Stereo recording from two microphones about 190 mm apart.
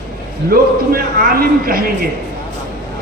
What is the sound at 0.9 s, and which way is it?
Speech, 50° right (ahead or behind).